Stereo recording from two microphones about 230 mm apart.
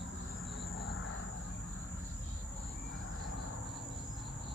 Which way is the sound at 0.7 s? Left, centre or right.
Left.